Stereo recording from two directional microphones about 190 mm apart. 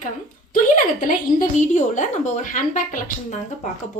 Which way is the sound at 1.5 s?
40° left (ahead or behind).